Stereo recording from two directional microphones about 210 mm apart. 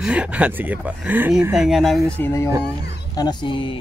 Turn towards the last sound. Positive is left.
turn(degrees=25)  # may be behind; listen again after turning